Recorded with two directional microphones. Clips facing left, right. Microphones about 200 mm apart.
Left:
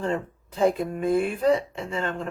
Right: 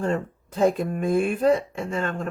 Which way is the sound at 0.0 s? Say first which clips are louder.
Right 2 dB; 50° right (ahead or behind).